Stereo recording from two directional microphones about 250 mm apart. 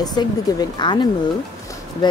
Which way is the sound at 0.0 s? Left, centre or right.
Centre.